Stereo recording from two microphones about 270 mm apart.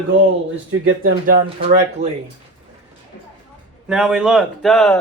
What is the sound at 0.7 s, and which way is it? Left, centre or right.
Speech, right.